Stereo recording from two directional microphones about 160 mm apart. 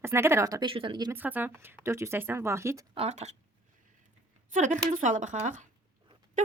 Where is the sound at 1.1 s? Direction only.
10° right (ahead or behind).